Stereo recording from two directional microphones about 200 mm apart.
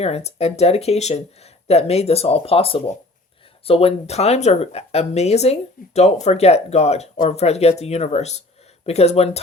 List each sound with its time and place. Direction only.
0.0 s speech: 30° left (ahead or behind)